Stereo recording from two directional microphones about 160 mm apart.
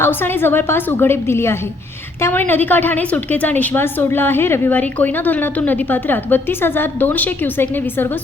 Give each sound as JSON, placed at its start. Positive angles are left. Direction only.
{"t": 0.0, "sound": "a woman's voice", "side_deg": 15}